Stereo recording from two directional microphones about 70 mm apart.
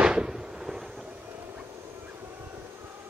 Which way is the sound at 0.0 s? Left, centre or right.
Centre.